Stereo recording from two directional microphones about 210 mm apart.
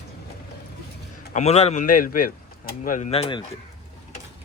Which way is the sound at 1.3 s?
30° left (ahead or behind).